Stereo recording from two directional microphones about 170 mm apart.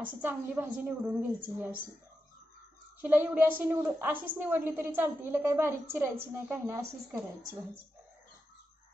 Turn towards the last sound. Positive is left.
turn(degrees=-15)  # may be behind; listen again after turning